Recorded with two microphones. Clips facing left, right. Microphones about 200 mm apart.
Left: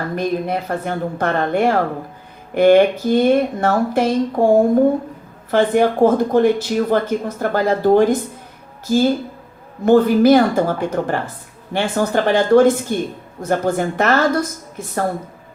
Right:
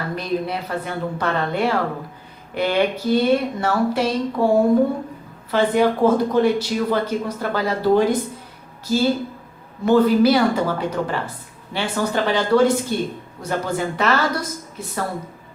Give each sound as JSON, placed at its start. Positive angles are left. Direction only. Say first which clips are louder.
{"t": 0.2, "sound": "speech", "louder": "left 4 dB", "side_deg": 45}